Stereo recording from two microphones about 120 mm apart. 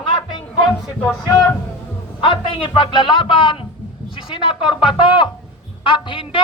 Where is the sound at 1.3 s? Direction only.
30° left (ahead or behind).